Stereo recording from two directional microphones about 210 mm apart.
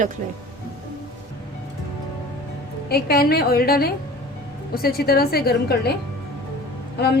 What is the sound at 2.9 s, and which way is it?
A woman's voice, 50° left (ahead or behind).